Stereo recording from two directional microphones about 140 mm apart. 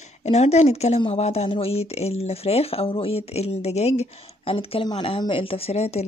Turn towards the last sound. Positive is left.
turn(degrees=50)  # may be behind; listen again after turning